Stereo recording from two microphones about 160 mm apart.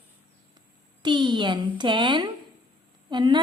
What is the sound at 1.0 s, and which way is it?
A woman's voice, 30° right (ahead or behind).